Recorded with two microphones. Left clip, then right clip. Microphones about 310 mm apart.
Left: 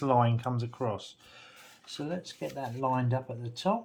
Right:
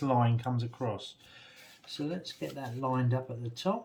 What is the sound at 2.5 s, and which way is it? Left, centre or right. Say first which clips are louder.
Speech: left 4 dB; centre.